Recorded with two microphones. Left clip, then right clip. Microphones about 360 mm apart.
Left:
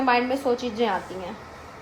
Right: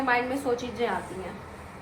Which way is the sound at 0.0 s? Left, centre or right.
Centre.